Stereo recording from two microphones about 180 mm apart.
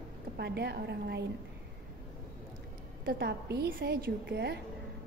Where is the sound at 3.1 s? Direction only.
65° right (ahead or behind).